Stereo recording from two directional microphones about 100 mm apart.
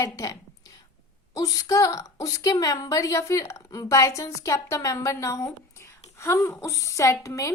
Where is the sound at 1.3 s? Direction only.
35° left (ahead or behind).